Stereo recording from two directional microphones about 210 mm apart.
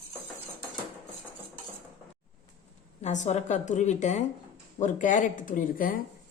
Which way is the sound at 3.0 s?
35° left (ahead or behind).